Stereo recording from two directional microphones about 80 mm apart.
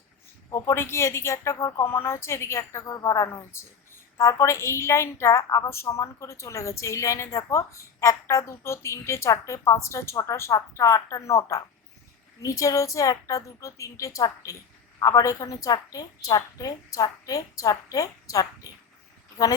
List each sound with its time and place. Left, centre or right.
0.5 s a woman's voice: left
2.8 s a woman's voice: left